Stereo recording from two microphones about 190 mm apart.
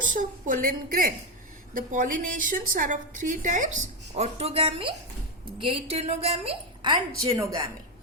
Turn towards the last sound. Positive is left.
turn(degrees=-15)  # may be behind; listen again after turning